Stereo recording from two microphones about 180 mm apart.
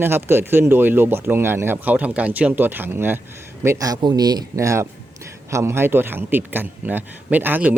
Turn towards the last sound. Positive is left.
turn(degrees=-10)  # may be behind; listen again after turning